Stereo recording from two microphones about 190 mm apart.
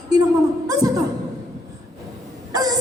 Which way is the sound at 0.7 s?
20° right (ahead or behind).